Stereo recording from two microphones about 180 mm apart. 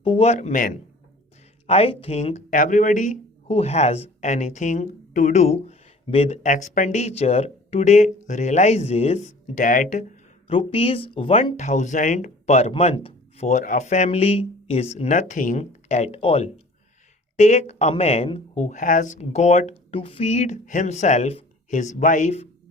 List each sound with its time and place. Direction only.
0.0 s speech: 30° left (ahead or behind)
3.4 s speech: 35° left (ahead or behind)
10.5 s speech: 30° left (ahead or behind)